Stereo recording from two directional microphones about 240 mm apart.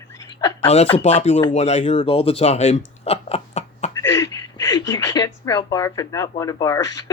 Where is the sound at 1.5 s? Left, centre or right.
Left.